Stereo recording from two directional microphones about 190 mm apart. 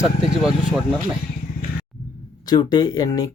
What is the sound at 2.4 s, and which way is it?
Speech, 20° left (ahead or behind).